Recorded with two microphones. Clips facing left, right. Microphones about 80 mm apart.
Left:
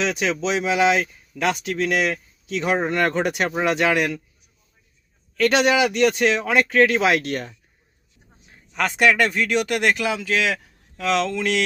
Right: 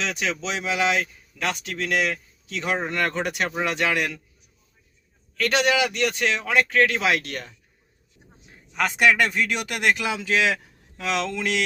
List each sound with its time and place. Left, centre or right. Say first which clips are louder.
0.0 s speech: left 5 dB; centre
5.4 s a man's voice: left 4 dB; centre
8.7 s speech: left 1 dB; centre